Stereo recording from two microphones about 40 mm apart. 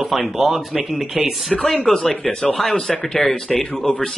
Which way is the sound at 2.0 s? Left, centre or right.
Left.